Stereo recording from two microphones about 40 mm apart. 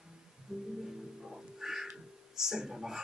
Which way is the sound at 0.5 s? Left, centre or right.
Centre.